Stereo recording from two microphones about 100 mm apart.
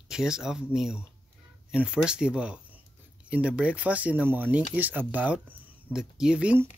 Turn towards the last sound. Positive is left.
turn(degrees=-10)  # may be behind; listen again after turning